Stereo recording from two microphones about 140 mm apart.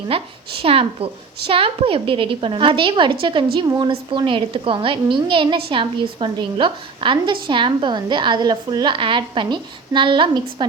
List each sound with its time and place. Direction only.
0.1 s a woman's voice: 40° right (ahead or behind)